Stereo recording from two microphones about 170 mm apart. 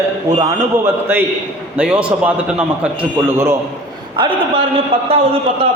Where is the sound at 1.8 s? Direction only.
5° right (ahead or behind).